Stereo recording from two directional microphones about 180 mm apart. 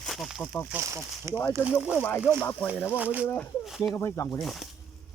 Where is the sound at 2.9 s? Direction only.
10° right (ahead or behind).